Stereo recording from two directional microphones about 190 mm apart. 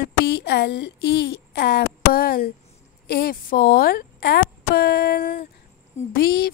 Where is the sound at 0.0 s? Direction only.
60° left (ahead or behind).